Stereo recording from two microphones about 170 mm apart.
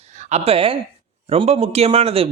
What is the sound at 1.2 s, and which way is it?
A man's voice, 35° right (ahead or behind).